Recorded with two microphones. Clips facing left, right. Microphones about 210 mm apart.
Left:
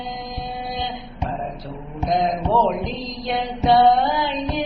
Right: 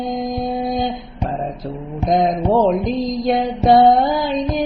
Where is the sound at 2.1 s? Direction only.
45° right (ahead or behind).